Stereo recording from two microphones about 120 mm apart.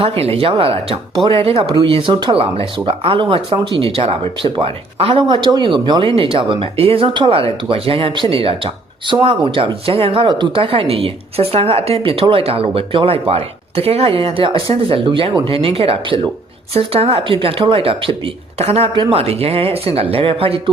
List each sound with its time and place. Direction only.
0.0 s speech: 55° right (ahead or behind)